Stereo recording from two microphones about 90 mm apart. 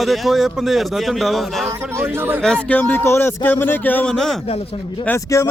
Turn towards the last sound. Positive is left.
turn(degrees=35)  # may be behind; listen again after turning